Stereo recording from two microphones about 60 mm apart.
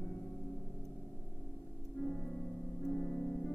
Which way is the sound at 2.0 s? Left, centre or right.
Left.